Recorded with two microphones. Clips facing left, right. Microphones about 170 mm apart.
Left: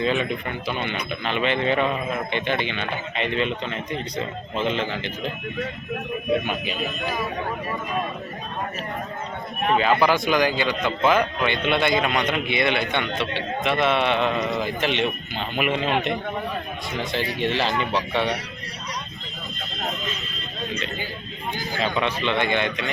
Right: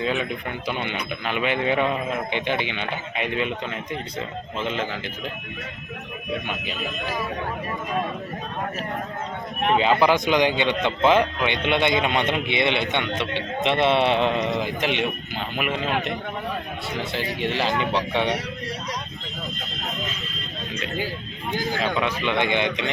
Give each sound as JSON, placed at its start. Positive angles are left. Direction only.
{"t": 0.0, "sound": "a man's voice", "side_deg": -5}
{"t": 9.7, "sound": "a man's voice", "side_deg": -20}
{"t": 21.8, "sound": "a man's voice", "side_deg": -5}